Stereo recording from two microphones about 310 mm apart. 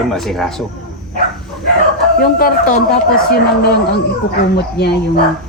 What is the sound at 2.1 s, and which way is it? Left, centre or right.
Speech, left.